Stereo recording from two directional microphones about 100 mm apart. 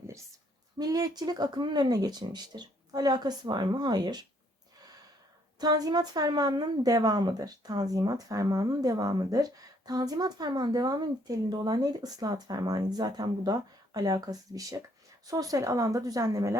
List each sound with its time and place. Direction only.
0.8 s speech: 40° right (ahead or behind)
5.5 s a woman's voice: 40° right (ahead or behind)